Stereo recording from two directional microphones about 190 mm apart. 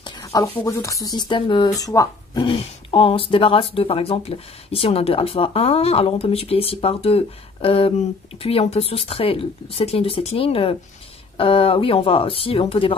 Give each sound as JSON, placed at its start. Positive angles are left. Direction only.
{"t": 0.0, "sound": "speech", "side_deg": 20}